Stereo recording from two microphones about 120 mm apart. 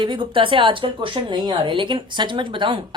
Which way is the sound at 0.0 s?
40° right (ahead or behind).